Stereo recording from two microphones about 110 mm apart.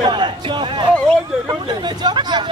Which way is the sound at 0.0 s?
45° right (ahead or behind).